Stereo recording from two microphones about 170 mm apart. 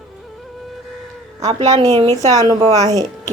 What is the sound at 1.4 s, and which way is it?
Speech, 40° right (ahead or behind).